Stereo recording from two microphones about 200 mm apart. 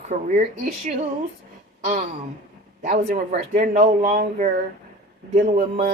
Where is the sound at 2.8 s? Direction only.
40° right (ahead or behind).